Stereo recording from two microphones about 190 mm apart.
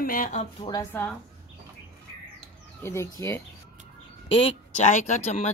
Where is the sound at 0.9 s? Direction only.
10° left (ahead or behind).